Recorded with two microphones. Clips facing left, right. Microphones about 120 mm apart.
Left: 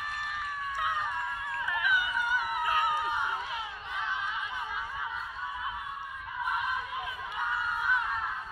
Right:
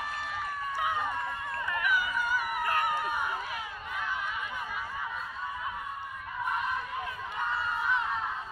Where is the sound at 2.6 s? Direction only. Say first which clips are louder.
Left 1 dB; 10° left (ahead or behind).